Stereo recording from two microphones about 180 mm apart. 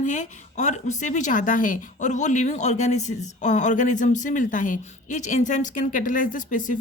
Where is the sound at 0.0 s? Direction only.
45° left (ahead or behind).